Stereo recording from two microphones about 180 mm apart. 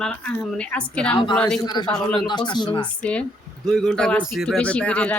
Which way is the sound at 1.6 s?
25° left (ahead or behind).